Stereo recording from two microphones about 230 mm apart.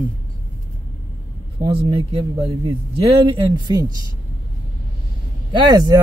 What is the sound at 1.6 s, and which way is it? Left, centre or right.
Speech, right.